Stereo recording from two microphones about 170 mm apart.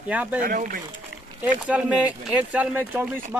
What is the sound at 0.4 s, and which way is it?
Speech, 55° right (ahead or behind).